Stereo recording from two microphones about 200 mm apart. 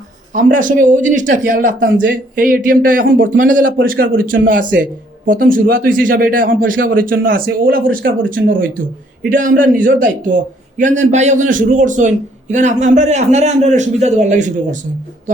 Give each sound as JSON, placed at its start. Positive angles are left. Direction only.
{"t": 0.3, "sound": "a man's voice", "side_deg": -40}
{"t": 1.9, "sound": "speech", "side_deg": -60}
{"t": 2.4, "sound": "a man's voice", "side_deg": -45}